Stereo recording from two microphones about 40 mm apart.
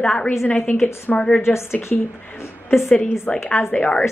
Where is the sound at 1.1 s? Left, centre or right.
Left.